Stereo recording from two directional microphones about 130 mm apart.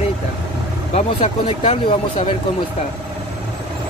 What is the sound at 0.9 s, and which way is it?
Speech, 45° left (ahead or behind).